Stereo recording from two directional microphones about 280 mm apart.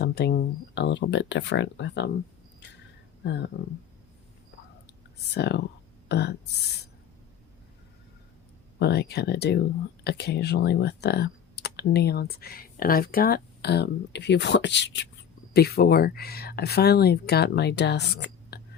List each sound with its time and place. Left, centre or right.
0.0 s speech: left
5.3 s speech: left
6.1 s beatboxing: left
8.8 s speech: left